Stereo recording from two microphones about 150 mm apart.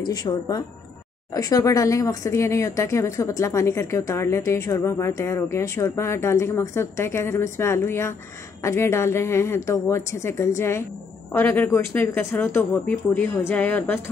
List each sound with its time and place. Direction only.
0.0 s speech: 25° left (ahead or behind)